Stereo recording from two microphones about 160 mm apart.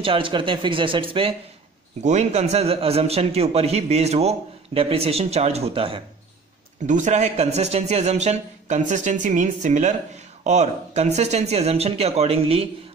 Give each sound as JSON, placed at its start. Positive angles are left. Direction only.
{"t": 0.0, "sound": "a man's voice", "side_deg": -35}
{"t": 2.0, "sound": "a man's voice", "side_deg": -45}
{"t": 6.9, "sound": "a man's voice", "side_deg": -50}